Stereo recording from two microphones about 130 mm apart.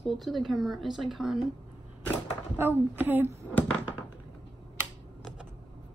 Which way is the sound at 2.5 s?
15° right (ahead or behind).